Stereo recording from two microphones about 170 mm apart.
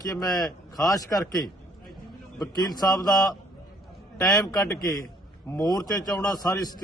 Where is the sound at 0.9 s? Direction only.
20° left (ahead or behind).